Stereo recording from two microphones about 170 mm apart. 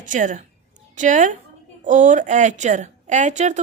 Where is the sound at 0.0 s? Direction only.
50° right (ahead or behind).